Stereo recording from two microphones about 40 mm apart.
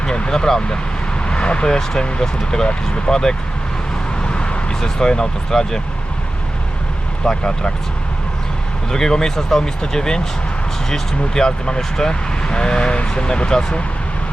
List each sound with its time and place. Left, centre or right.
0.0 s speech: centre
1.3 s speech: left
4.2 s a sound: left
4.7 s speech: centre
7.3 s speech: left
8.9 s speech: centre